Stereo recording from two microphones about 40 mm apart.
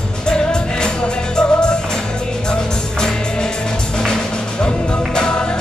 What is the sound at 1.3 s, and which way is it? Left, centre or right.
Music, left.